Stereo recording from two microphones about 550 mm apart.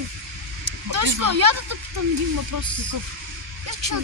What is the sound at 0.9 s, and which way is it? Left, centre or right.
Speech, right.